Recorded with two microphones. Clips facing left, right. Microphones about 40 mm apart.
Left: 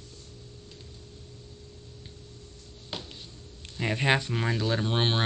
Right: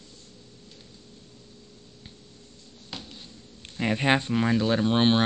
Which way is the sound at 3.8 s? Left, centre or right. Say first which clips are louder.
Right 2 dB; centre.